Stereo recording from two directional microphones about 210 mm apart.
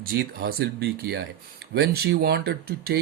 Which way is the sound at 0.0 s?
45° right (ahead or behind).